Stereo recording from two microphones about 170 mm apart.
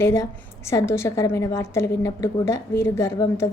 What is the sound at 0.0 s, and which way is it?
A woman's voice, 15° left (ahead or behind).